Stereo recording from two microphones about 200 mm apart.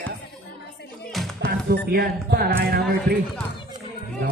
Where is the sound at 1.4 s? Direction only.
50° right (ahead or behind).